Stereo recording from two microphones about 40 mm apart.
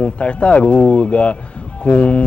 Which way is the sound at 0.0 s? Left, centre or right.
Left.